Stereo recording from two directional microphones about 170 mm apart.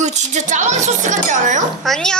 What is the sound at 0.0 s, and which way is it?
Speech, 45° right (ahead or behind).